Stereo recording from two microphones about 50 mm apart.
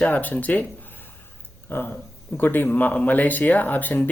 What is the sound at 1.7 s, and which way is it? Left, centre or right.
Speech, left.